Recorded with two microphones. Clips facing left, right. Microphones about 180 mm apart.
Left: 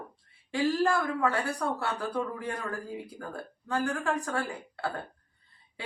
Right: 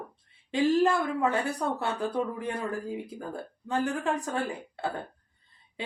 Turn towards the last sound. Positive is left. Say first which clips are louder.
# right 2 dB
turn(degrees=-20)  # may be behind; listen again after turning